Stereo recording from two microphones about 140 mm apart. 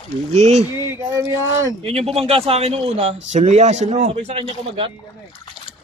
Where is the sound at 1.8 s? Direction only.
45° right (ahead or behind).